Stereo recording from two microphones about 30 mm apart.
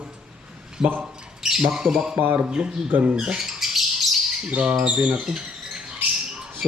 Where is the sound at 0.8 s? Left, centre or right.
Centre.